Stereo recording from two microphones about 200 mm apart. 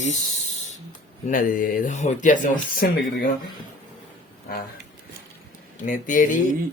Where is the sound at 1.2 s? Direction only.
45° left (ahead or behind).